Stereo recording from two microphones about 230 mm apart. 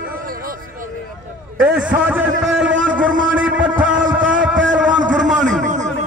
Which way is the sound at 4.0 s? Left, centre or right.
Right.